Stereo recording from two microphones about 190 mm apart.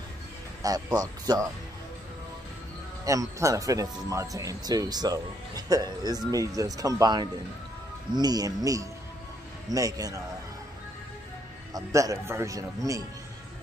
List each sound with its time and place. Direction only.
0.6 s speech: 20° right (ahead or behind)
3.1 s speech: 15° right (ahead or behind)
9.7 s speech: 20° right (ahead or behind)
11.7 s speech: 15° right (ahead or behind)